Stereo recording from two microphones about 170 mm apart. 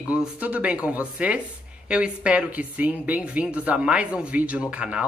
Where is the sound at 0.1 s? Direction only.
10° right (ahead or behind).